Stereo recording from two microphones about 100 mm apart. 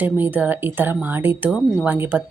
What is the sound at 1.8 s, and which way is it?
Speech, 20° right (ahead or behind).